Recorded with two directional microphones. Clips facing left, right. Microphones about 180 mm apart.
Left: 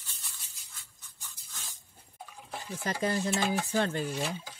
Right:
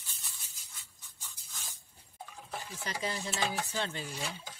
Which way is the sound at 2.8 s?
50° left (ahead or behind).